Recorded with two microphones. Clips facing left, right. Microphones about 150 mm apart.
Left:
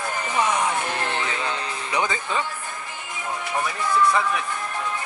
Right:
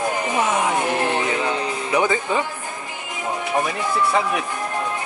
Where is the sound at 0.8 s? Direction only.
15° right (ahead or behind).